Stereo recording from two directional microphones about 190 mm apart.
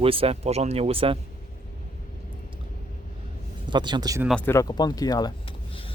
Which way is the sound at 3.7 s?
25° right (ahead or behind).